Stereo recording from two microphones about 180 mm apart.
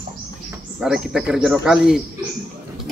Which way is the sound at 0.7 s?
5° right (ahead or behind).